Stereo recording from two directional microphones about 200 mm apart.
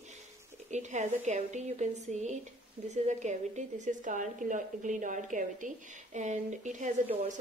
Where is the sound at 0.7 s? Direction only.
35° right (ahead or behind).